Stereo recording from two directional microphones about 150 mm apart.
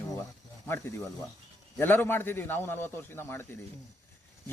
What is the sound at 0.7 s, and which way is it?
Speech, 15° left (ahead or behind).